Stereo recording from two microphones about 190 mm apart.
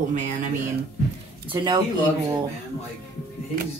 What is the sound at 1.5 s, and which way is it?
Speech, 25° right (ahead or behind).